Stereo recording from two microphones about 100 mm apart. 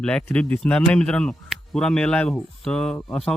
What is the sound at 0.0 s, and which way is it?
Speech, 10° left (ahead or behind).